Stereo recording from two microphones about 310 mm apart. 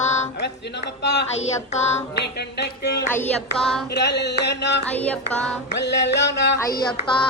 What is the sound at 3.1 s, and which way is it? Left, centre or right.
Child singing, centre.